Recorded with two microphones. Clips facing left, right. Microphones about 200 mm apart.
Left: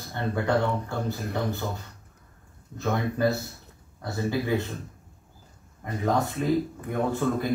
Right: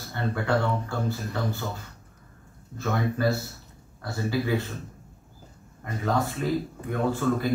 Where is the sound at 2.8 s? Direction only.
20° left (ahead or behind).